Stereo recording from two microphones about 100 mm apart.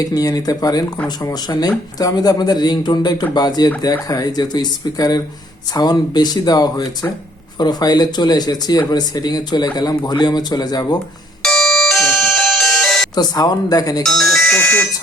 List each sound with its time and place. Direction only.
0.1 s speech: 40° left (ahead or behind)
11.4 s music: 5° left (ahead or behind)
13.1 s speech: 45° left (ahead or behind)
14.0 s speech: 5° left (ahead or behind)